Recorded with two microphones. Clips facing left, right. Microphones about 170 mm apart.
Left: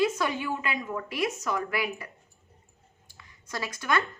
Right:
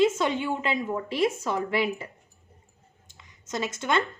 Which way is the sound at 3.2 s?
20° right (ahead or behind).